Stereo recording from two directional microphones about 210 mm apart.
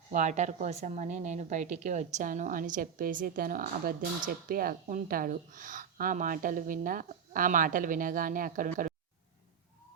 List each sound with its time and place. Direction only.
0.1 s a woman's voice: 35° right (ahead or behind)